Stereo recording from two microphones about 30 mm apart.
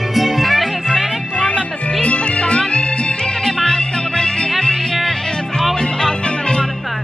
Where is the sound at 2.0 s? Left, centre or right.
Left.